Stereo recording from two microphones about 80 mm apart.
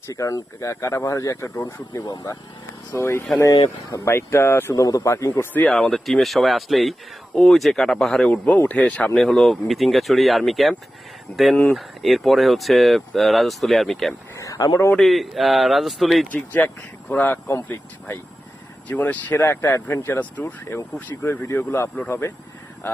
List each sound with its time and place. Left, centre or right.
0.1 s speech: left
4.7 s speech: left
5.3 s speech: left
5.6 s speech: centre
8.3 s speech: centre
9.1 s speech: centre
11.3 s speech: centre
11.7 s speech: centre
14.3 s a sound: left
14.9 s speech: centre
16.3 s speech: left